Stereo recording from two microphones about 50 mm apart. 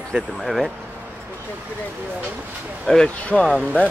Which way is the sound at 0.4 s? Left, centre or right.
Centre.